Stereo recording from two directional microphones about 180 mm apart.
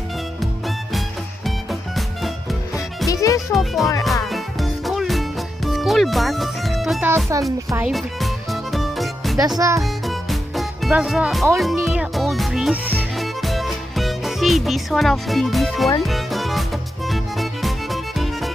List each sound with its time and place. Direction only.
0.4 s music: centre (ahead or behind)
3.1 s music: 20° left (ahead or behind)
3.5 s speech: centre (ahead or behind)
4.0 s music: centre (ahead or behind)
7.3 s a child's voice: 15° right (ahead or behind)
7.7 s music: 5° right (ahead or behind)
9.6 s a child's voice: 15° right (ahead or behind)
10.0 s music: centre (ahead or behind)